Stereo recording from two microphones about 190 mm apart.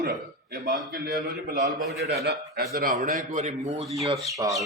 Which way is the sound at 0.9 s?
55° right (ahead or behind).